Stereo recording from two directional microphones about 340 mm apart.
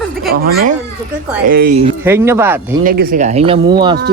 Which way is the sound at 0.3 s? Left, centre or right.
Right.